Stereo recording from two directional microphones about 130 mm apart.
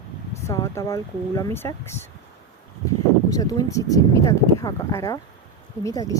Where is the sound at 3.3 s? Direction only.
25° left (ahead or behind).